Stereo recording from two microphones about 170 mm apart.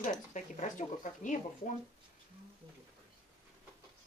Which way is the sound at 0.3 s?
45° left (ahead or behind).